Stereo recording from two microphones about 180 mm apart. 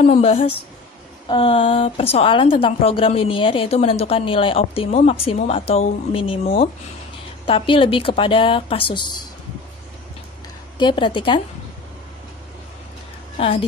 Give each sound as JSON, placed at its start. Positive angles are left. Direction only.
{"t": 0.0, "sound": "a woman's voice", "side_deg": 35}
{"t": 7.4, "sound": "a woman's voice", "side_deg": 30}
{"t": 10.8, "sound": "a woman's voice", "side_deg": 25}